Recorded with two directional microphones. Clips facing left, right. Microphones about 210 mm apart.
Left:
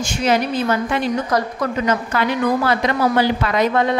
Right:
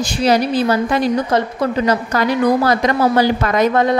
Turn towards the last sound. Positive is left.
turn(degrees=-40)  # may be behind; listen again after turning